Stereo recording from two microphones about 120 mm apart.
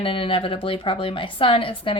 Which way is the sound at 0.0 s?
50° left (ahead or behind).